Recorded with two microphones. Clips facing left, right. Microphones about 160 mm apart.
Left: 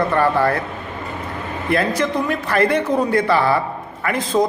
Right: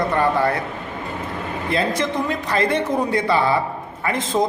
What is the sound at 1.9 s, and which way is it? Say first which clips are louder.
A man's voice: left 2 dB; 25° right (ahead or behind).